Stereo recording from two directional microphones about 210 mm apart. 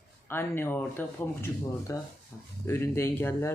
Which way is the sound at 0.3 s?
10° left (ahead or behind).